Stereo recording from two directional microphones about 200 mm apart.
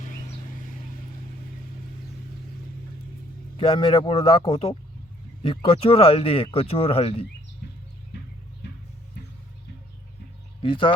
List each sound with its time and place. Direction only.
3.6 s speech: 25° left (ahead or behind)
10.6 s speech: 25° left (ahead or behind)